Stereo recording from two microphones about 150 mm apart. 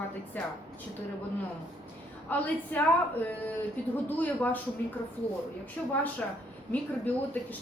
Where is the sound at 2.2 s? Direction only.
10° left (ahead or behind).